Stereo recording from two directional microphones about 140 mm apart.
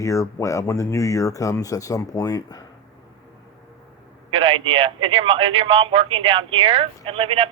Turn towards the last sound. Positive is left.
turn(degrees=-40)  # may be behind; listen again after turning